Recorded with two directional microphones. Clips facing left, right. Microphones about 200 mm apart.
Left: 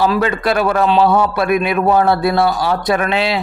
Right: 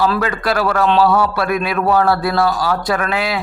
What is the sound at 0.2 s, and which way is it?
Speech, 25° left (ahead or behind).